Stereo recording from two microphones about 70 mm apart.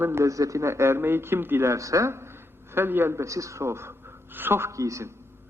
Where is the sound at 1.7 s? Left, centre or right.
Right.